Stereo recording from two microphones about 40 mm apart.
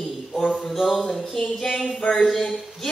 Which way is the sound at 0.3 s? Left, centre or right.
Centre.